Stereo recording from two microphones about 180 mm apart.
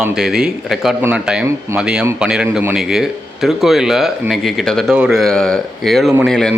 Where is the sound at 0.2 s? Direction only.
Centre (ahead or behind).